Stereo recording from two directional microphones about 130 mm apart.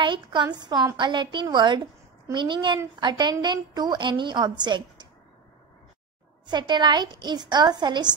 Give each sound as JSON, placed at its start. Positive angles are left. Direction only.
{"t": 0.0, "sound": "a woman's voice", "side_deg": -40}
{"t": 6.4, "sound": "a woman's voice", "side_deg": -35}